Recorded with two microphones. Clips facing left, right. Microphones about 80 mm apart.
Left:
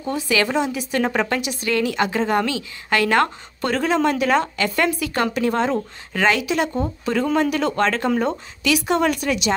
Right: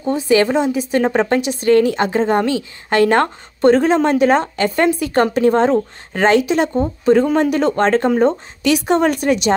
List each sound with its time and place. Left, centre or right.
0.0 s a woman's voice: right